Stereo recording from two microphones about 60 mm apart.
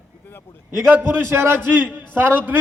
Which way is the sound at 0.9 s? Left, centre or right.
Right.